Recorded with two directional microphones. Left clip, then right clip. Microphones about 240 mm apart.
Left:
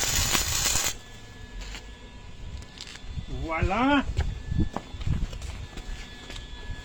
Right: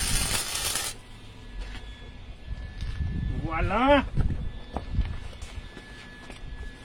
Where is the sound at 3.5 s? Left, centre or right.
Right.